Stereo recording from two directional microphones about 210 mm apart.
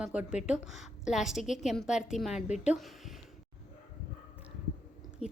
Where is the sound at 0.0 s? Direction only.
5° right (ahead or behind).